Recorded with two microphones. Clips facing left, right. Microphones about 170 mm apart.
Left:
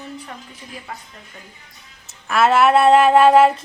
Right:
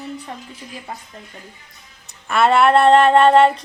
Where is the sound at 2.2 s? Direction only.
Centre (ahead or behind).